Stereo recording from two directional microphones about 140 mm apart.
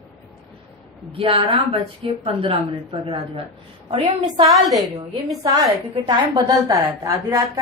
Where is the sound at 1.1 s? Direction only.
40° right (ahead or behind).